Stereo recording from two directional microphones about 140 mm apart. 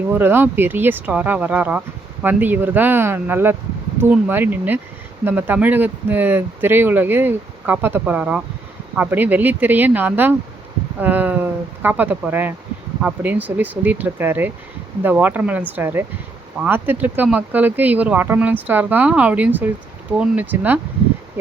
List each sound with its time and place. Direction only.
0.1 s speech: 15° right (ahead or behind)